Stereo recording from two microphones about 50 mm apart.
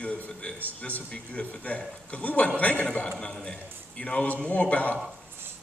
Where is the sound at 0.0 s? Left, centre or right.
Left.